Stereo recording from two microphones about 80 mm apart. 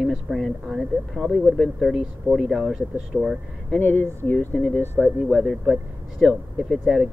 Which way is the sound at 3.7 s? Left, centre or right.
Left.